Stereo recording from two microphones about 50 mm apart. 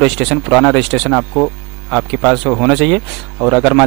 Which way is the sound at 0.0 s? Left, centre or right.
Centre.